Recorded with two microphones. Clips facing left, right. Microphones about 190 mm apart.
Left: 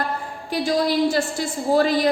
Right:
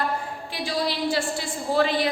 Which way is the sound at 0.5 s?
45° left (ahead or behind).